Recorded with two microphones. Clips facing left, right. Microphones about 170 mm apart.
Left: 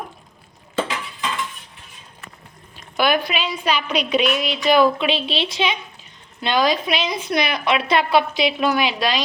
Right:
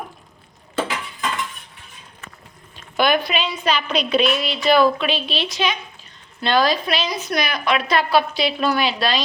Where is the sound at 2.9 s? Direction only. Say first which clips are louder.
Right 1 dB; 10° left (ahead or behind).